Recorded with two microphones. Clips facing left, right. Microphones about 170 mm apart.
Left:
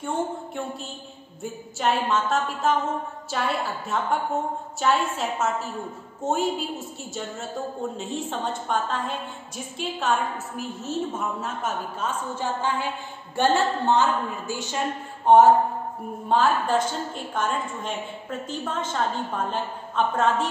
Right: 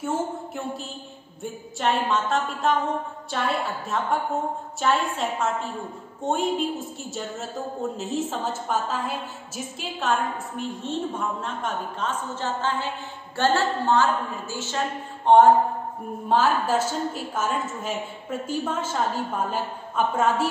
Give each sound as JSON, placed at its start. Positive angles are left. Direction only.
{"t": 0.0, "sound": "a woman's voice", "side_deg": 0}